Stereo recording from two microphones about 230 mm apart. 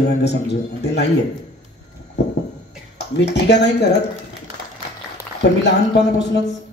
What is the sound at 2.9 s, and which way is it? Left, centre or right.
A man's voice, left.